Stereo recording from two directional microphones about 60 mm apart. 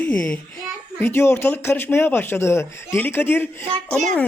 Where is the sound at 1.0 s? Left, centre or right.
Left.